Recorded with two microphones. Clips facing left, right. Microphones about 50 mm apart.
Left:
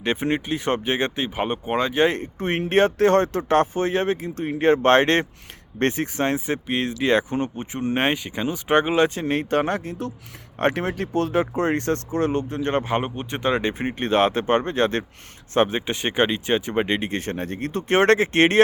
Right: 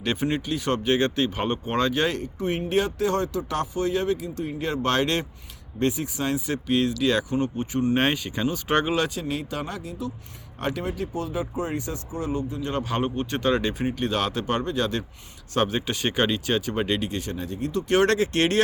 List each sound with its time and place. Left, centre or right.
0.0 s speech: left
2.6 s speech: left
5.8 s speech: left
6.2 s speech: left
9.3 s speech: left
12.7 s speech: left
15.5 s speech: left